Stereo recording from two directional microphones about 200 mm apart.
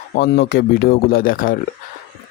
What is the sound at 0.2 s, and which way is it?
Speech, 60° left (ahead or behind).